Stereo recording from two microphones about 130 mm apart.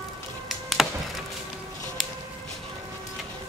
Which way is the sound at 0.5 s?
Centre (ahead or behind).